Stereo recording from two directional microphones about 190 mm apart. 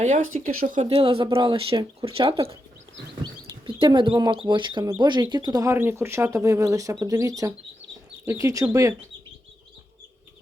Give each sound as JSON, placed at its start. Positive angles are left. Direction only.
{"t": 0.3, "sound": "speech", "side_deg": -45}